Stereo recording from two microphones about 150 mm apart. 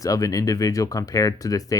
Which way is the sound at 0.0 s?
25° left (ahead or behind).